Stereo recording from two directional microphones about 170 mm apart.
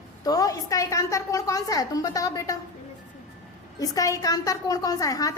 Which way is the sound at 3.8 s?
20° left (ahead or behind).